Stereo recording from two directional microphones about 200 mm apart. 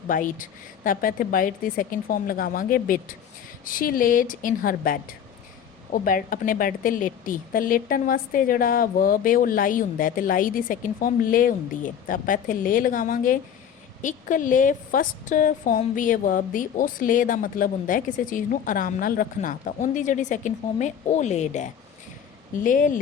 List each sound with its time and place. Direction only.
0.1 s a woman's voice: 40° left (ahead or behind)